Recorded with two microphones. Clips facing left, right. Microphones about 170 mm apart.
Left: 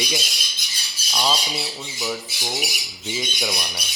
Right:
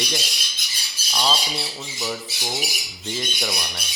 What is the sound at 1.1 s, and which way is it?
Speech, 5° left (ahead or behind).